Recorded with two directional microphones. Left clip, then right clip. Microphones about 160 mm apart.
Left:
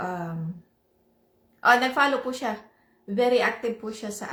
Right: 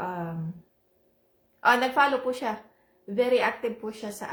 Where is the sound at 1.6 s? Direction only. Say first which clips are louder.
Left 2 dB; 10° right (ahead or behind).